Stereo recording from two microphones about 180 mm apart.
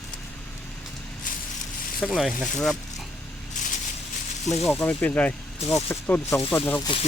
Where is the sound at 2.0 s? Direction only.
Centre (ahead or behind).